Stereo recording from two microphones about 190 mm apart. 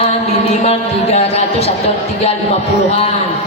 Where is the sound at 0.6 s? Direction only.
35° left (ahead or behind).